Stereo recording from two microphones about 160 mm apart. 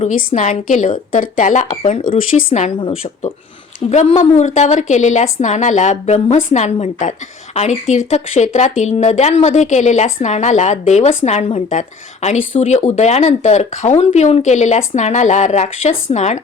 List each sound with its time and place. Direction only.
0.0 s speech: 60° left (ahead or behind)
6.1 s speech: 30° left (ahead or behind)
6.5 s speech: 45° left (ahead or behind)